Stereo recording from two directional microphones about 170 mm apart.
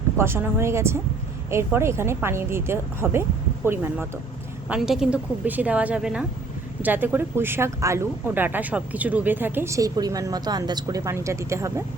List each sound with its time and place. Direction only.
0.2 s speech: 15° right (ahead or behind)